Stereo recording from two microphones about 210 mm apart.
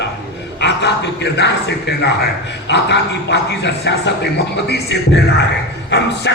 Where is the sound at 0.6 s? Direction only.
55° left (ahead or behind).